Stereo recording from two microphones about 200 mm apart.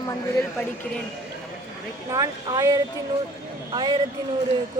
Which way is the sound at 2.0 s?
20° right (ahead or behind).